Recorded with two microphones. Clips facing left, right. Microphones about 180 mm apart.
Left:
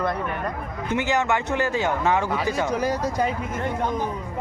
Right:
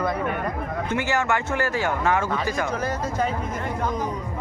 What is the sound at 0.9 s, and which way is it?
Speech, 20° left (ahead or behind).